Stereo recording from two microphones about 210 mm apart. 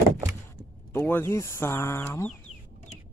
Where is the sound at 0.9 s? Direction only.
10° left (ahead or behind).